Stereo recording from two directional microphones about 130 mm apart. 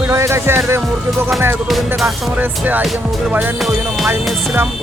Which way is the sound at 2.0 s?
15° right (ahead or behind).